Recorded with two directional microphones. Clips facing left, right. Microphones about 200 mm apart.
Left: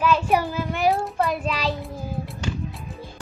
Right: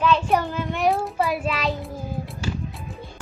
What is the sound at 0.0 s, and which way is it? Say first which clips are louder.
Child singing: even; 5° left (ahead or behind).